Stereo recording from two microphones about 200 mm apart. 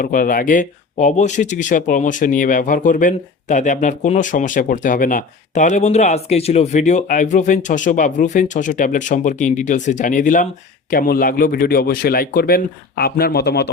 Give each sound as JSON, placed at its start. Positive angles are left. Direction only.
{"t": 0.0, "sound": "speech", "side_deg": 45}